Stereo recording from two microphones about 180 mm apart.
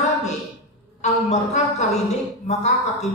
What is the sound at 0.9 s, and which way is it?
A man's voice, 40° left (ahead or behind).